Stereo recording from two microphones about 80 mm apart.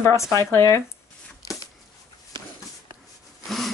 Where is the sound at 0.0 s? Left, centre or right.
Left.